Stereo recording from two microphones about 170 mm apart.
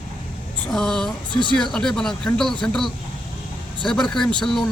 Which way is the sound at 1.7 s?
5° left (ahead or behind).